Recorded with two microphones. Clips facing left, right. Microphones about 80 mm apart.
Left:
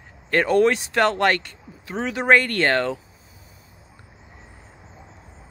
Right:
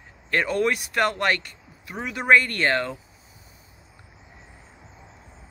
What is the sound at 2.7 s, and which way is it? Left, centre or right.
Speech, left.